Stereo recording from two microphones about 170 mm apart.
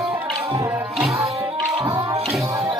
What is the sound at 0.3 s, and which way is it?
Music, 20° right (ahead or behind).